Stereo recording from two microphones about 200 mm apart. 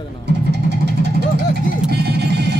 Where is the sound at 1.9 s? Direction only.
55° right (ahead or behind).